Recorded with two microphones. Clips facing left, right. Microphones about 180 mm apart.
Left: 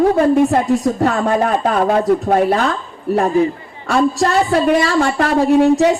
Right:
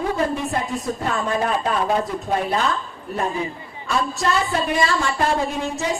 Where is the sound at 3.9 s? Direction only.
70° left (ahead or behind).